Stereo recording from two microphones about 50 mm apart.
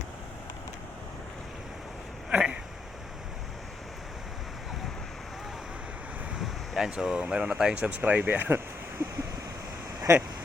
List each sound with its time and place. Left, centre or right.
2.3 s a sound: centre
6.4 s speech: centre
7.9 s speech: right
10.1 s speech: right